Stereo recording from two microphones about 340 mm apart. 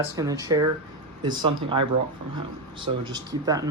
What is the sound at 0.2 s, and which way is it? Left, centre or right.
Speech, centre.